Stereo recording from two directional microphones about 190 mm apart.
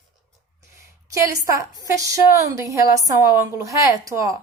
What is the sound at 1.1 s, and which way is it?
A woman's voice, 15° right (ahead or behind).